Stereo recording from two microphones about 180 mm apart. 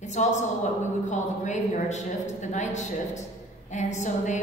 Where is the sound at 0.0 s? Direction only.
40° left (ahead or behind).